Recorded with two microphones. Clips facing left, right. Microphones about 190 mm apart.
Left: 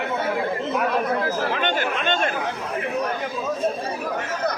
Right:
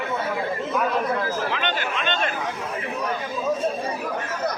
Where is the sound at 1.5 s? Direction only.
50° left (ahead or behind).